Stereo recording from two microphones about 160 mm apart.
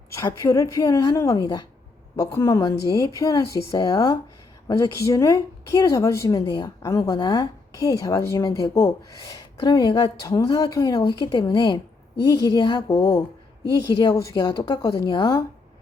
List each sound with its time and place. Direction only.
0.2 s speech: 20° left (ahead or behind)